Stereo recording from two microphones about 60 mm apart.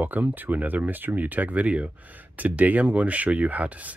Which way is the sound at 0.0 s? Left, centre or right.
Right.